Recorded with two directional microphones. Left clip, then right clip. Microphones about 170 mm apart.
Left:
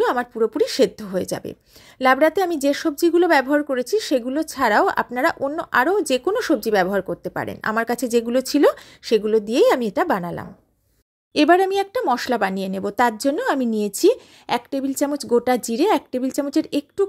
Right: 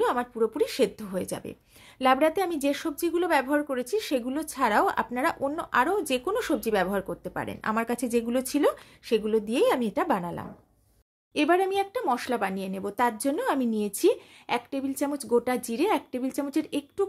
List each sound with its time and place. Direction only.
0.0 s speech: 35° left (ahead or behind)